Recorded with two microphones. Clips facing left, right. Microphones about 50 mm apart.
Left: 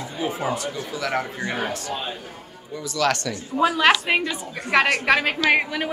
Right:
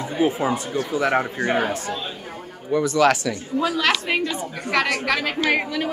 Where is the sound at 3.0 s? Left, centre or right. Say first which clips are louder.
Right 3 dB; centre.